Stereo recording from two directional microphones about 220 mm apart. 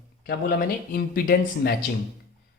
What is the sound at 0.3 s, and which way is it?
Speech, 45° left (ahead or behind).